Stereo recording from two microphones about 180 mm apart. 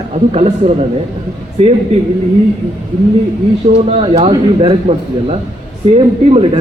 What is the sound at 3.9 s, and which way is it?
A man's voice, 30° right (ahead or behind).